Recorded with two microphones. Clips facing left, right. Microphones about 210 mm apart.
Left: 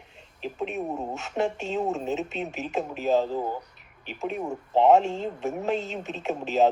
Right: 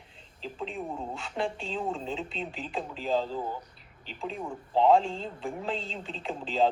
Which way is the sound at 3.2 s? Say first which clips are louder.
Left 5 dB; 45° left (ahead or behind).